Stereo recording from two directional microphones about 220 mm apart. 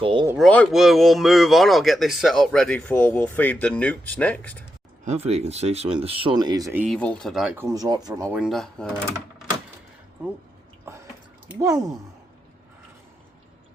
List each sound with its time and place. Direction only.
0.0 s speech: 20° right (ahead or behind)
0.3 s speech: 5° left (ahead or behind)
5.0 s speech: 30° right (ahead or behind); by 6.8 s 15° right (ahead or behind)
6.8 s speech: 5° left (ahead or behind); by 8.4 s 15° right (ahead or behind)
8.4 s speech: centre (ahead or behind)
11.4 s speech: 15° right (ahead or behind)